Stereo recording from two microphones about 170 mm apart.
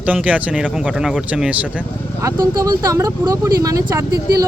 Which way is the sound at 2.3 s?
20° right (ahead or behind).